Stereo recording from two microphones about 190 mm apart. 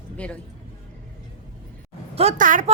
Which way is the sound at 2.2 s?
40° right (ahead or behind).